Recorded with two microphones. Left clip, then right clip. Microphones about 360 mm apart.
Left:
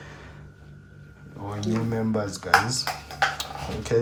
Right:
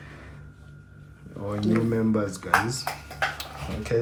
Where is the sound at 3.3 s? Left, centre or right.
Centre.